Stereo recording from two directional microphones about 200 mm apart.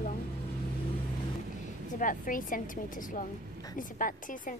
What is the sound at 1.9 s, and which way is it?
A woman's voice, 40° left (ahead or behind).